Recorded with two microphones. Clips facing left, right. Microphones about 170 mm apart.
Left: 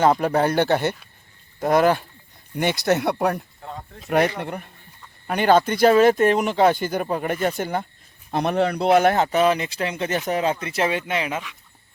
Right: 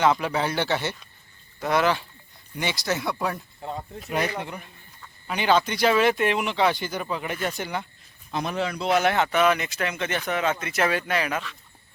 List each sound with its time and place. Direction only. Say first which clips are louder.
0.0 s speech: left 4 dB; 45° left (ahead or behind)
8.3 s speech: left 7 dB; 60° left (ahead or behind)
9.1 s speech: left 3 dB; 35° left (ahead or behind); by 11.5 s 15° left (ahead or behind)